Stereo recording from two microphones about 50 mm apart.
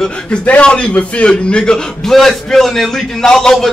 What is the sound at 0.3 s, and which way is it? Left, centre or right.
A man's voice, left.